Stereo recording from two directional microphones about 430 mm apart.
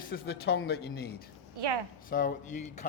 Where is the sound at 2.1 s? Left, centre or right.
Centre.